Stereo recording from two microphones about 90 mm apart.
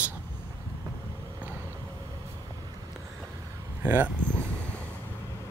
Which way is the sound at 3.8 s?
25° right (ahead or behind).